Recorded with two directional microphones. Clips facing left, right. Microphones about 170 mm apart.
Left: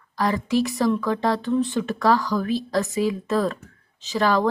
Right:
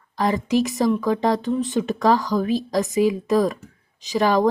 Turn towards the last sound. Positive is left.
turn(degrees=-15)  # may be behind; listen again after turning